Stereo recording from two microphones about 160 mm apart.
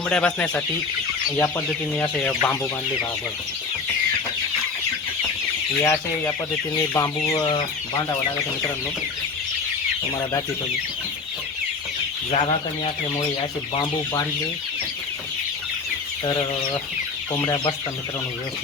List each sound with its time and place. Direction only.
0.1 s speech: 10° left (ahead or behind)
5.8 s speech: 20° left (ahead or behind)
12.3 s speech: 40° left (ahead or behind)
17.3 s speech: 20° left (ahead or behind)